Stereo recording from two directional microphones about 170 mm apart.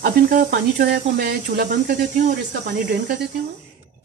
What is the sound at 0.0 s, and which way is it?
Speech, 65° right (ahead or behind).